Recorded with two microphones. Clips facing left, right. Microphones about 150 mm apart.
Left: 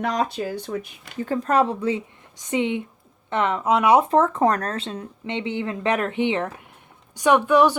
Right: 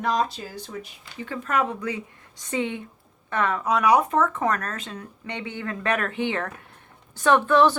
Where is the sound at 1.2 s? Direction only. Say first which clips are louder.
Left 6 dB; 35° left (ahead or behind).